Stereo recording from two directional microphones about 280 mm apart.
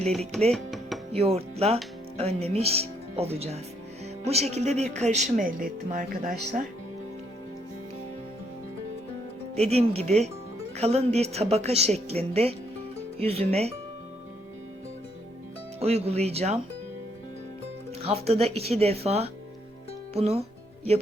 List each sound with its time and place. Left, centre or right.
0.5 s music: centre
1.1 s speech: right
9.6 s speech: right
15.8 s speech: right
18.0 s speech: right